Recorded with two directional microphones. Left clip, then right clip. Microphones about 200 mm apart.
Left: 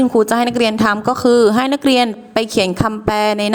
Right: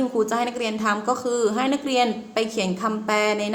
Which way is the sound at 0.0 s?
45° left (ahead or behind).